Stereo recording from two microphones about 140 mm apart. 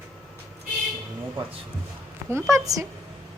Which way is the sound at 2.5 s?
25° right (ahead or behind).